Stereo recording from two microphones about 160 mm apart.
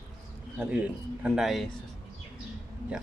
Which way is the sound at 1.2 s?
Centre (ahead or behind).